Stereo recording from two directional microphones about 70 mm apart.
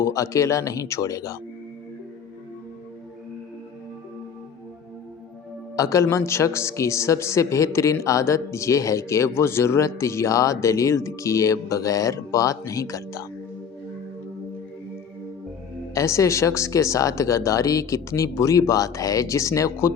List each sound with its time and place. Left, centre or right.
0.0 s speech: left
5.7 s speech: left
16.0 s speech: left